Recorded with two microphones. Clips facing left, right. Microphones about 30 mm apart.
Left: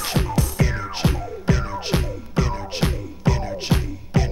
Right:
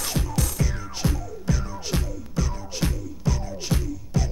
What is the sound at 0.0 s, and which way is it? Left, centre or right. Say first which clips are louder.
Music: left 4 dB; left.